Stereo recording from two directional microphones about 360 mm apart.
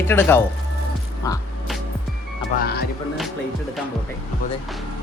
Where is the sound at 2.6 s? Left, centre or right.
Left.